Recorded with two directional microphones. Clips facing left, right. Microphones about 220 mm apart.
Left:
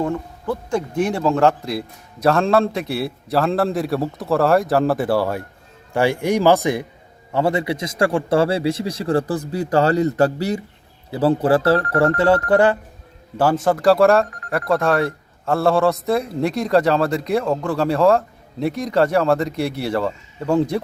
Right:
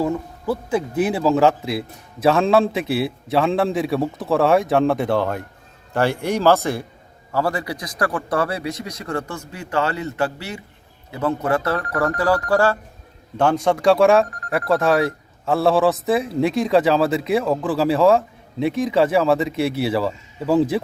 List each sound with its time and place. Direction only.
0.0 s a man's voice: 5° right (ahead or behind); by 12.7 s 20° left (ahead or behind)
13.3 s speech: 5° left (ahead or behind)